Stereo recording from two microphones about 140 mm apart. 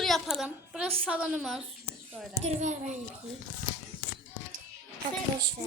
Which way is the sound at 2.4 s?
60° right (ahead or behind).